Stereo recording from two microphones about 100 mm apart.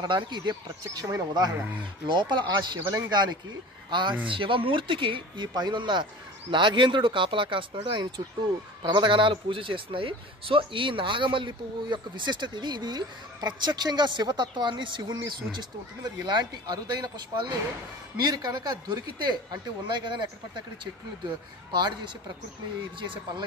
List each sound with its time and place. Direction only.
0.0 s speech: 45° right (ahead or behind)
2.0 s speech: 50° right (ahead or behind)